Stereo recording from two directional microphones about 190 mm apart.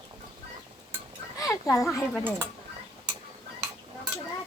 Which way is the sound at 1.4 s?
15° left (ahead or behind).